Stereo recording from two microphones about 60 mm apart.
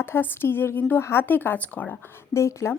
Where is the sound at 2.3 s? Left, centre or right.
Left.